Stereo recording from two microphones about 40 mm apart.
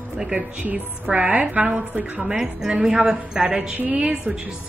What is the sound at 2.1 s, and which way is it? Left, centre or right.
A woman's voice, centre.